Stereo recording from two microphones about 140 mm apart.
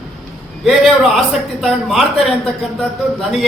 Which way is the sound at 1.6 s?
Centre (ahead or behind).